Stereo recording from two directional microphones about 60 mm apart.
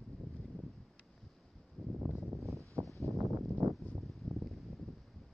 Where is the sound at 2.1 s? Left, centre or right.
Centre.